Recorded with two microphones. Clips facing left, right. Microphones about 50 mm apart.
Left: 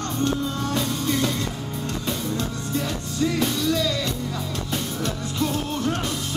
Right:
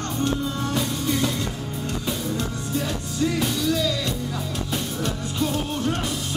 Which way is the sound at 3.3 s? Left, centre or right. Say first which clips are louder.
Even; centre.